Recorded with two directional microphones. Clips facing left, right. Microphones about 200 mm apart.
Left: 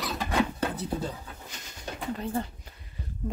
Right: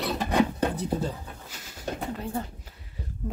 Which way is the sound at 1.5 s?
5° right (ahead or behind).